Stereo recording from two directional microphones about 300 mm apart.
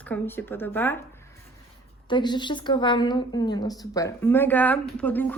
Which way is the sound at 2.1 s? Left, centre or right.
Centre.